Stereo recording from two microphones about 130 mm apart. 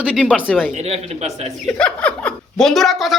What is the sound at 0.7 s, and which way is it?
Speech, 60° right (ahead or behind).